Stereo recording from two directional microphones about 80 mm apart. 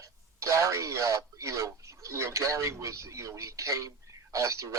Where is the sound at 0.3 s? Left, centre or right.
Right.